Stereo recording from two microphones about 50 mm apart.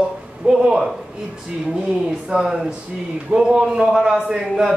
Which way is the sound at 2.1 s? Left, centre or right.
Centre.